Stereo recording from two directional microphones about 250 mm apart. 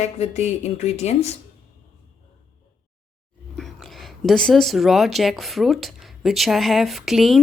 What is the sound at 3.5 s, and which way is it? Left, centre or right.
Speech, centre.